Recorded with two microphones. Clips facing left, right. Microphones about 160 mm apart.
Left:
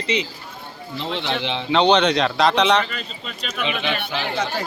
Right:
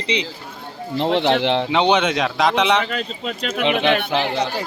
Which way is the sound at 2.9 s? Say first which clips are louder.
Right 8 dB; 85° right.